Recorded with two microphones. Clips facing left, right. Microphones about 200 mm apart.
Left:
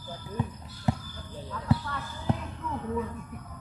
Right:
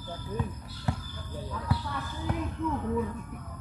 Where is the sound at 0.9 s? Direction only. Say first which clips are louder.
Left 5 dB; 20° left (ahead or behind).